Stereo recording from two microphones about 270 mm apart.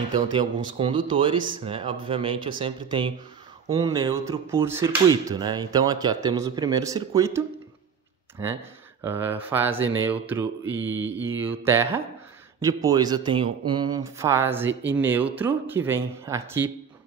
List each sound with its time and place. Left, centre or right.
0.1 s speech: centre
9.0 s speech: centre
10.6 s mantra: right
11.6 s speech: centre
14.7 s mantra: right
15.0 s speech: centre